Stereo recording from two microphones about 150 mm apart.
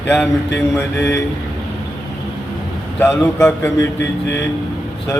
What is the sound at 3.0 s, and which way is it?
A man's voice, 15° left (ahead or behind).